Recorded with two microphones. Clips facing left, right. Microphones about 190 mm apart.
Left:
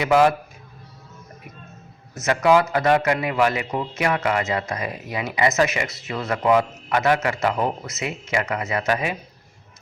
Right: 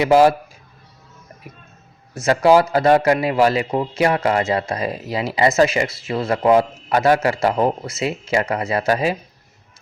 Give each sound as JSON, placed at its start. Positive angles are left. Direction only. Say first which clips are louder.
{"t": 0.0, "sound": "a man's voice", "louder": "right 4 dB", "side_deg": -30}
{"t": 2.1, "sound": "a man's voice", "louder": "right 4 dB", "side_deg": -30}